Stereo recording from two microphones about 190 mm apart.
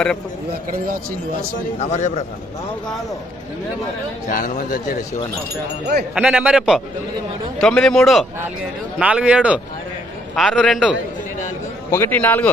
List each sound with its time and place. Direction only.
1.8 s a man's voice: 35° left (ahead or behind)
4.3 s speech: 45° left (ahead or behind)
6.1 s a man's voice: 5° right (ahead or behind)
11.9 s a man's voice: 10° left (ahead or behind)